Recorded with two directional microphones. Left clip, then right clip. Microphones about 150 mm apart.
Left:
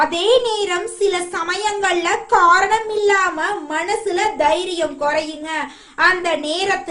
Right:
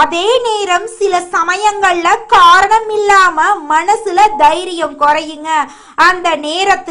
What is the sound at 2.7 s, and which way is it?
A woman's voice, 40° right (ahead or behind).